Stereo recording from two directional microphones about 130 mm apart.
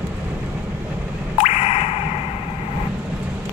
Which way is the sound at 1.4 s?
55° left (ahead or behind).